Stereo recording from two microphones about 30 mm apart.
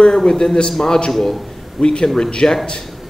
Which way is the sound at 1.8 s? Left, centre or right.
Left.